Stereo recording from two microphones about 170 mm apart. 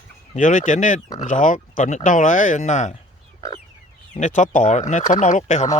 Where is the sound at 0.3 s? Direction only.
50° left (ahead or behind).